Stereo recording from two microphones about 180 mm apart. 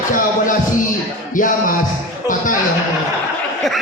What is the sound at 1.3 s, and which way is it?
Speech, 50° left (ahead or behind).